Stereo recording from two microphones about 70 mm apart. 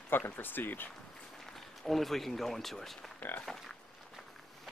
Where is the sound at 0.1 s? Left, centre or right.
Left.